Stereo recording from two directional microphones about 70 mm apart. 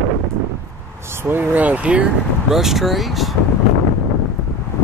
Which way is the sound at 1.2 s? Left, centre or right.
Right.